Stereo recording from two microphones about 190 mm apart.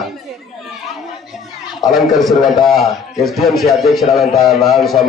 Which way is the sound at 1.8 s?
Centre (ahead or behind).